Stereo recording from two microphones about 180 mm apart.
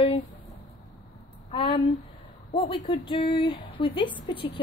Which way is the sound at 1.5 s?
30° left (ahead or behind).